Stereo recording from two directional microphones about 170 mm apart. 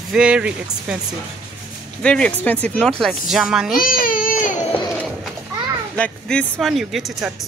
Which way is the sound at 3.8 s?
55° left (ahead or behind).